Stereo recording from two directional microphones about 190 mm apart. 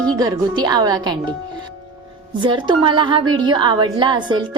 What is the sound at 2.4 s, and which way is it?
A woman's voice, 25° right (ahead or behind).